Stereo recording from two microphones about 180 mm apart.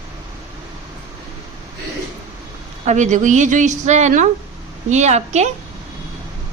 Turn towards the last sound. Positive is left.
turn(degrees=-40)  # may be behind; listen again after turning